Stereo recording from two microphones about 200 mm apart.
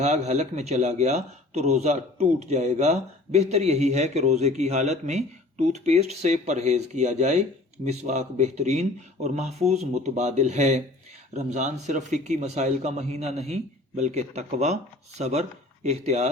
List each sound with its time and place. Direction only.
0.0 s speech: 35° right (ahead or behind)